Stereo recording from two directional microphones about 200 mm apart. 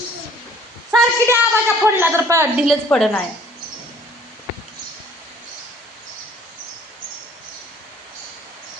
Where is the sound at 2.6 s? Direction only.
5° left (ahead or behind).